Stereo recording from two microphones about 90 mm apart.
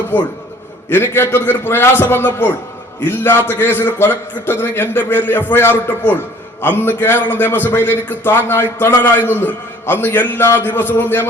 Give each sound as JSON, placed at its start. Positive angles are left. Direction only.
{"t": 0.9, "sound": "a man's voice", "side_deg": 25}